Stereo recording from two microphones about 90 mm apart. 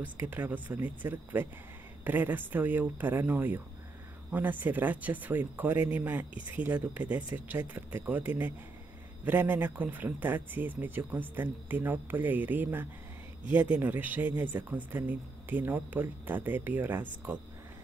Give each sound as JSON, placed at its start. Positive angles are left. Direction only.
{"t": 0.3, "sound": "speech", "side_deg": -20}